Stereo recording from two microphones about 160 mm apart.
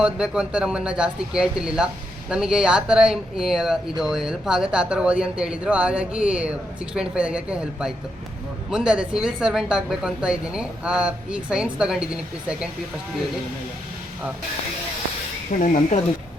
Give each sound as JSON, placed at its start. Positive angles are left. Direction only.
{"t": 0.0, "sound": "speech", "side_deg": -5}
{"t": 15.5, "sound": "speech", "side_deg": 50}